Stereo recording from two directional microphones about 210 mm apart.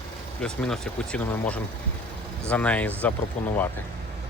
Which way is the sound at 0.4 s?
5° left (ahead or behind).